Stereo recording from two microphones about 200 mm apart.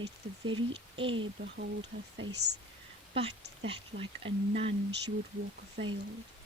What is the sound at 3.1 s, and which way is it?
Speech, 25° right (ahead or behind).